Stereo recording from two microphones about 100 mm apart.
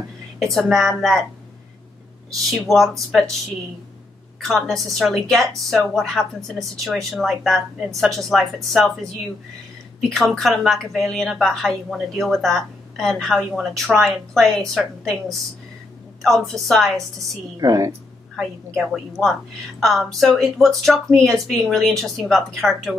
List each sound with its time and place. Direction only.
0.4 s a woman's voice: centre (ahead or behind)
2.5 s a woman's voice: centre (ahead or behind)
4.4 s a woman's voice: centre (ahead or behind)
9.9 s a woman's voice: centre (ahead or behind)
16.2 s a woman's voice: centre (ahead or behind)
17.6 s a woman's voice: 40° right (ahead or behind)
18.3 s a woman's voice: 5° right (ahead or behind)